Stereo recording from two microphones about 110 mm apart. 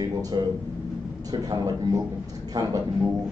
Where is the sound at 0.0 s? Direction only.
40° right (ahead or behind).